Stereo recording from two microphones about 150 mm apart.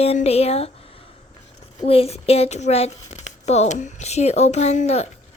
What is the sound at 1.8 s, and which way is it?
Speech, 40° left (ahead or behind).